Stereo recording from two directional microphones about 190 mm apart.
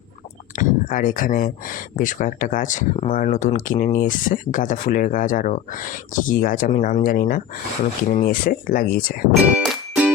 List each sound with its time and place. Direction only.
0.5 s speech: 45° left (ahead or behind)
9.6 s music: 5° right (ahead or behind)